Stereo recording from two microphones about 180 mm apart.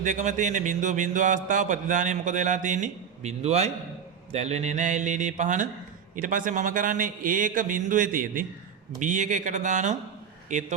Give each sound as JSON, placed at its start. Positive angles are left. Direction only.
{"t": 0.0, "sound": "speech", "side_deg": -40}